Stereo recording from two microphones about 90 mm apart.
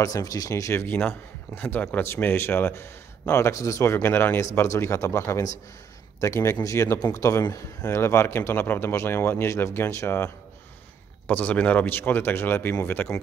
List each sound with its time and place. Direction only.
0.0 s speech: 40° left (ahead or behind); by 13.1 s 20° left (ahead or behind)